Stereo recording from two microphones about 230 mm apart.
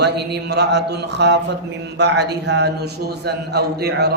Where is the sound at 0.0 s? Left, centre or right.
Right.